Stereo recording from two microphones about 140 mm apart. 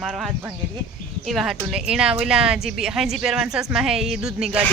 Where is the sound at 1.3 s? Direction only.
5° right (ahead or behind).